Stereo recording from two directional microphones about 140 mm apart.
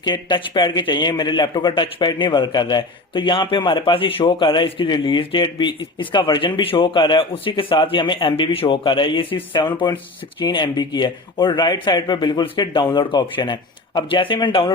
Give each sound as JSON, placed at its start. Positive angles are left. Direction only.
{"t": 0.0, "sound": "a man's voice", "side_deg": 35}